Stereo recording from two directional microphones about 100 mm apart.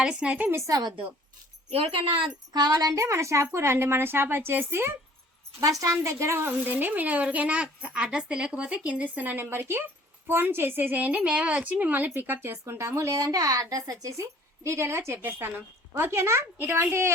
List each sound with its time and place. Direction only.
0.0 s a woman's voice: 10° right (ahead or behind)
0.5 s a woman's voice: 40° right (ahead or behind)
1.7 s a woman's voice: 75° right (ahead or behind)
2.5 s a woman's voice: 40° right (ahead or behind); by 17.1 s 25° right (ahead or behind)